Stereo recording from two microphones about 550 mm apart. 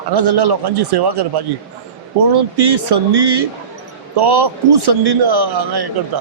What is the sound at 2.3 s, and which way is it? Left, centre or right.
A man's voice, right.